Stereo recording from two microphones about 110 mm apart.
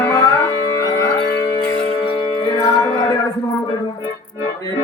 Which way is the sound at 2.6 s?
30° left (ahead or behind).